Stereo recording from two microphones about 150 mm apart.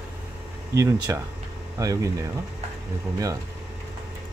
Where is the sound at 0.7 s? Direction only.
20° right (ahead or behind).